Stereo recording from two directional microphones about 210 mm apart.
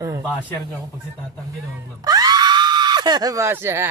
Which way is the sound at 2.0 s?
20° right (ahead or behind).